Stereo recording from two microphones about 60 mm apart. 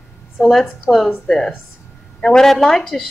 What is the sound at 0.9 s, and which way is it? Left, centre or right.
Speech, centre.